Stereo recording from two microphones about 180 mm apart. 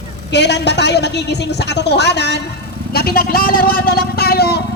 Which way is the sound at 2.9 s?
55° left (ahead or behind).